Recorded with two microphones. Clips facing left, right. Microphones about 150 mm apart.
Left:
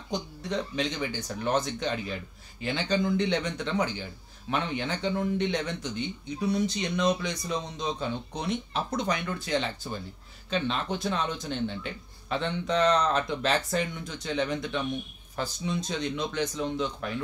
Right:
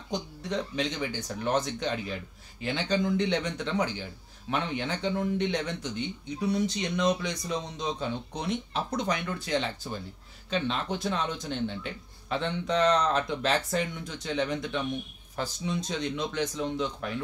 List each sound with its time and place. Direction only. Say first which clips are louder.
0.5 s speech: even; 10° right (ahead or behind)